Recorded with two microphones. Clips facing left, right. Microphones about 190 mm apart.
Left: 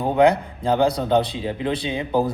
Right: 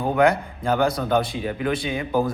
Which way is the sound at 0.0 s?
25° left (ahead or behind).